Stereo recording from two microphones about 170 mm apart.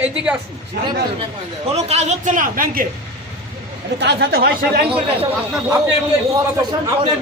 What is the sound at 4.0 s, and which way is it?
Speech, 80° right.